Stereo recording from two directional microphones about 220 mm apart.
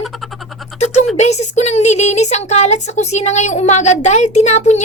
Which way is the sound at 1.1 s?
30° left (ahead or behind).